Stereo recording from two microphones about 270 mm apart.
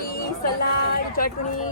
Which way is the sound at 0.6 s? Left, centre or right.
Left.